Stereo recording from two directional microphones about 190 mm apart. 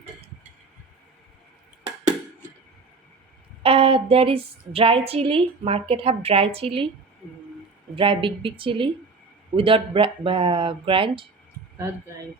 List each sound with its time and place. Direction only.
3.6 s a woman's voice: 30° right (ahead or behind)
7.9 s a woman's voice: 25° right (ahead or behind)